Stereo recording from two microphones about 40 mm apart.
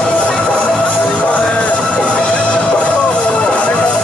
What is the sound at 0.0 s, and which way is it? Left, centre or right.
Music, left.